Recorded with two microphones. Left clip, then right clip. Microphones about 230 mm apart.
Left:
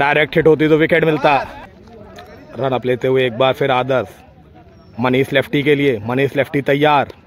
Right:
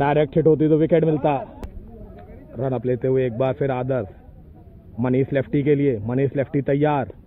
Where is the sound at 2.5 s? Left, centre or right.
Centre.